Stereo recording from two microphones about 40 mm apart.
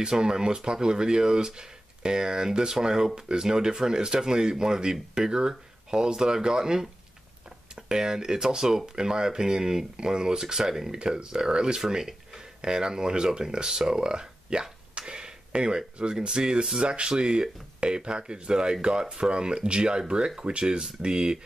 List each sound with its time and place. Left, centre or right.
0.0 s speech: centre